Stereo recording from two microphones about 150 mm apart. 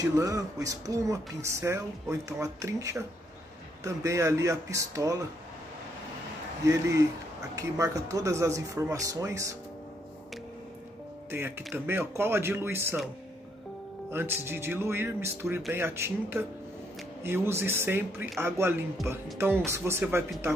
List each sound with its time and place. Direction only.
0.0 s speech: 20° right (ahead or behind)
6.6 s speech: 20° right (ahead or behind)
11.2 s speech: 15° right (ahead or behind)
14.1 s speech: 15° right (ahead or behind)